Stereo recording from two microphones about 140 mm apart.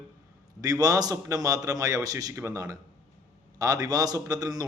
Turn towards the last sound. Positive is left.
turn(degrees=-25)  # may be behind; listen again after turning